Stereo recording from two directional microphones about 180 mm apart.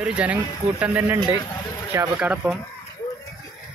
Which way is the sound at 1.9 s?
10° right (ahead or behind).